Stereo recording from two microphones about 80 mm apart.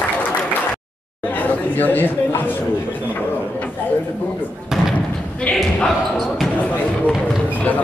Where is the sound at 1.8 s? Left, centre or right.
Left.